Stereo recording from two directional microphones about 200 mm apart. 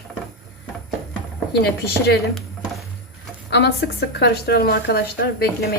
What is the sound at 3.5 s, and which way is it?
A woman's voice, 55° left (ahead or behind).